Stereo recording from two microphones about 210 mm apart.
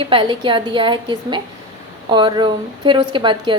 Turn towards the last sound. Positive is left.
turn(degrees=-25)  # may be behind; listen again after turning